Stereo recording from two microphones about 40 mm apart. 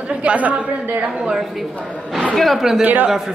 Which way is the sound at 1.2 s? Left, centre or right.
Centre.